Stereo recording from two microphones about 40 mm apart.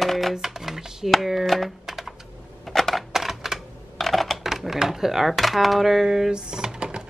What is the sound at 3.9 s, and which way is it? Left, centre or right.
Typing, centre.